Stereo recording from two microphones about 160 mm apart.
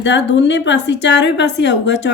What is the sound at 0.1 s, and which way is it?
Speech, 90° left.